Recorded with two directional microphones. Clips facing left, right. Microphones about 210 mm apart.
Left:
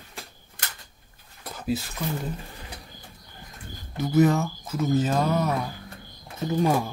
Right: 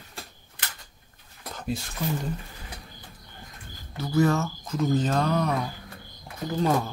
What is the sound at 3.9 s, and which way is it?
Speech, 20° left (ahead or behind).